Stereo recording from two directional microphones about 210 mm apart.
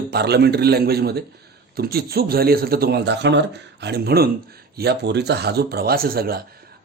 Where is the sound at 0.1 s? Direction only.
50° right (ahead or behind).